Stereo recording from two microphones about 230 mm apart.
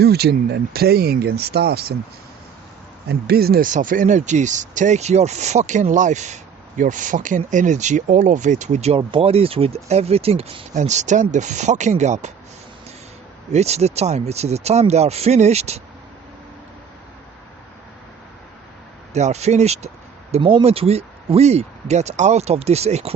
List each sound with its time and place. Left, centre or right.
0.0 s speech: right
3.1 s speech: right
13.5 s speech: right
19.1 s speech: right